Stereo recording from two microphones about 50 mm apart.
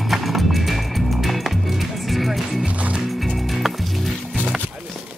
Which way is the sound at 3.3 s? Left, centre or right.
Centre.